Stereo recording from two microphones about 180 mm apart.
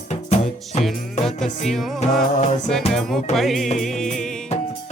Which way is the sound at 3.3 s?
Centre (ahead or behind).